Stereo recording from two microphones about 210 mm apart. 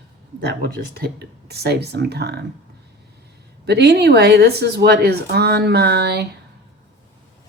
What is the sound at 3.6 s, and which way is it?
Speech, 50° right (ahead or behind).